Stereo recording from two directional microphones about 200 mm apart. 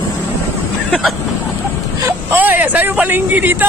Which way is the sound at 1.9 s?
15° right (ahead or behind).